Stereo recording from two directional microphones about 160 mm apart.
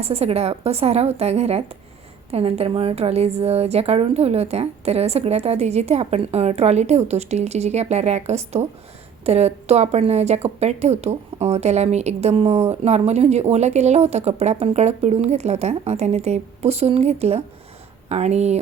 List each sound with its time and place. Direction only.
0.0 s a woman's voice: 40° right (ahead or behind)